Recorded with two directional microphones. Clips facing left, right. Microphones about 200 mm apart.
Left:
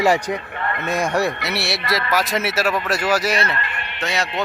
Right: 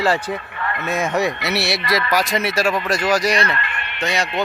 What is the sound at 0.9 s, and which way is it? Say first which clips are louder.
Speech: even; centre (ahead or behind).